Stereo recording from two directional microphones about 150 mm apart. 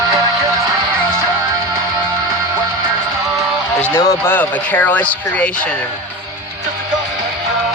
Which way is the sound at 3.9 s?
15° left (ahead or behind).